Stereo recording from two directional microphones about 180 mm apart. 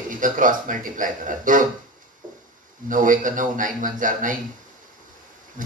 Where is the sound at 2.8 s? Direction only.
50° right (ahead or behind).